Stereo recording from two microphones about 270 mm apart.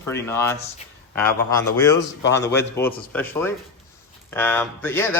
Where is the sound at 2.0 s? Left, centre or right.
Left.